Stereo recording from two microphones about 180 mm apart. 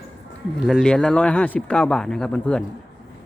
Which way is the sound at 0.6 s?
Centre (ahead or behind).